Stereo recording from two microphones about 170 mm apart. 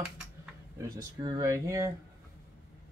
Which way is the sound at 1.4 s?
20° right (ahead or behind).